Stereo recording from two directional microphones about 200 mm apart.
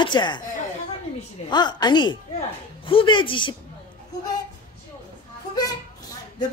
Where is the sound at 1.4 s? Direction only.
20° left (ahead or behind).